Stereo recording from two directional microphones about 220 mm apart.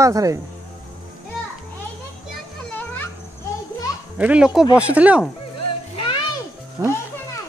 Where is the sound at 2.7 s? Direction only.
5° left (ahead or behind).